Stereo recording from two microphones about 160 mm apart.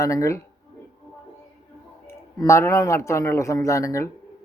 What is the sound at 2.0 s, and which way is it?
A man's voice, 15° left (ahead or behind).